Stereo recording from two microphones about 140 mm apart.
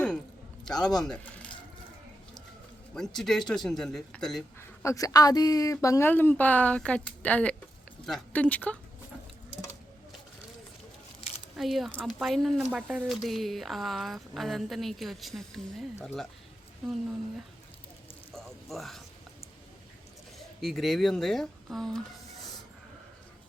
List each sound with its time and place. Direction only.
0.6 s speech: 5° left (ahead or behind)
2.9 s speech: 5° left (ahead or behind)
4.6 s a woman's voice: 20° left (ahead or behind)
11.5 s speech: centre (ahead or behind)
16.8 s speech: centre (ahead or behind)
18.3 s a sound: centre (ahead or behind)
20.6 s speech: centre (ahead or behind)